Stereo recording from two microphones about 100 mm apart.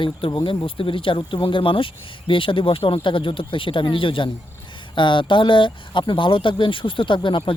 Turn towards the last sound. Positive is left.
turn(degrees=55)  # may be behind; listen again after turning